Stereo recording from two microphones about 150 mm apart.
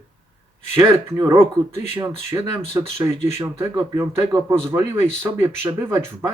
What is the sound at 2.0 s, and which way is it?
Speech, 15° right (ahead or behind).